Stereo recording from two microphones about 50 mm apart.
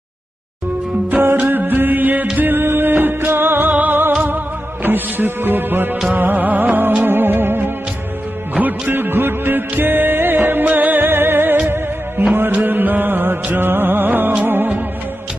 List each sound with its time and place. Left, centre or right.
1.4 s music: right
7.1 s music: right
8.5 s music: right
12.6 s music: right